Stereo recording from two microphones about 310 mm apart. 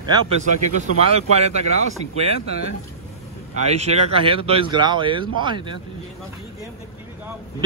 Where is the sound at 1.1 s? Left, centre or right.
Right.